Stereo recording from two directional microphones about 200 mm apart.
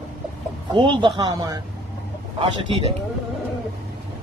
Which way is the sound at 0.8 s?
25° right (ahead or behind).